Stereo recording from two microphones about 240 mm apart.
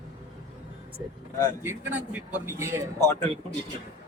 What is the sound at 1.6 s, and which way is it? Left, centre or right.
Speech, centre.